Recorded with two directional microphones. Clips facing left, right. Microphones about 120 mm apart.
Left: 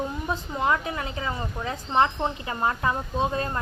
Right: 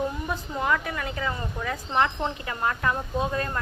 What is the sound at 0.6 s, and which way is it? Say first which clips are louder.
A woman's voice: left 1 dB; 25° left (ahead or behind).